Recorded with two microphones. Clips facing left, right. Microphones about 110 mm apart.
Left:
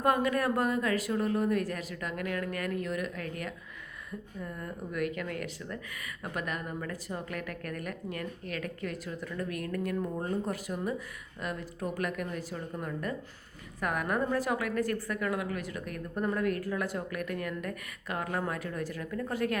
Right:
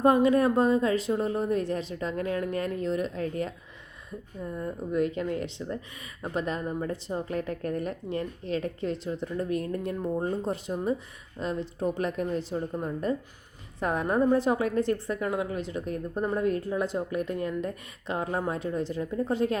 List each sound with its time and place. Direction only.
0.0 s speech: 25° right (ahead or behind)